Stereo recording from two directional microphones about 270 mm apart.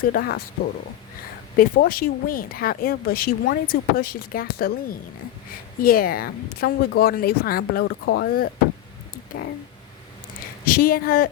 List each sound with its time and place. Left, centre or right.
0.0 s speech: left
1.5 s speech: left
10.7 s speech: left